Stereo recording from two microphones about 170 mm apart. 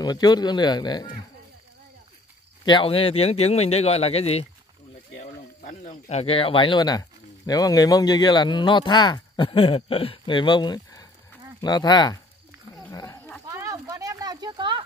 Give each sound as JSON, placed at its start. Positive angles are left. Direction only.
{"t": 0.0, "sound": "speech", "side_deg": 25}
{"t": 2.6, "sound": "speech", "side_deg": 30}
{"t": 5.1, "sound": "speech", "side_deg": 50}
{"t": 12.9, "sound": "roaring cats", "side_deg": 20}
{"t": 13.5, "sound": "a sound", "side_deg": -20}